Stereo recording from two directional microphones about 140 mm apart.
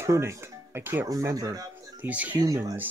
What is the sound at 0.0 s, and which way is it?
Speech, 20° right (ahead or behind).